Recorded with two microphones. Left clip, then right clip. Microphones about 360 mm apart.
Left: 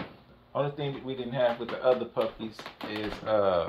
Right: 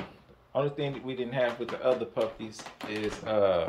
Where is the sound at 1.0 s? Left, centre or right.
Centre.